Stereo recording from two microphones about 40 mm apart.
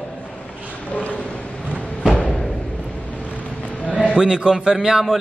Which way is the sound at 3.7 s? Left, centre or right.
Left.